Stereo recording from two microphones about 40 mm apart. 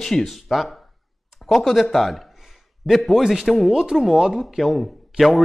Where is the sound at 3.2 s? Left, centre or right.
Centre.